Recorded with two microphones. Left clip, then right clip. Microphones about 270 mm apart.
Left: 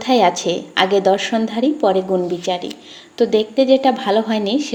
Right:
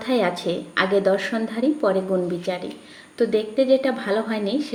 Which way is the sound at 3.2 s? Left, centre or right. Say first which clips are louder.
Left 5 dB; left.